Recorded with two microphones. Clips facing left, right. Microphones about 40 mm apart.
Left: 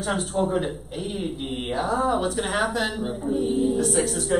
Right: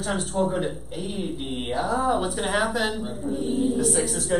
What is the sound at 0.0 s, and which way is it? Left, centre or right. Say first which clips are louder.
A woman's voice: even; centre.